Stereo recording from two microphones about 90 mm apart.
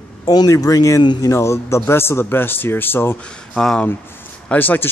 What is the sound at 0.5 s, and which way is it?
Speech, 40° left (ahead or behind).